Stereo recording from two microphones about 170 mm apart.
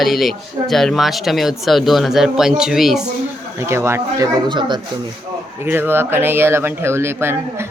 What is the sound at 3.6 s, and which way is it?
Speech, 15° right (ahead or behind).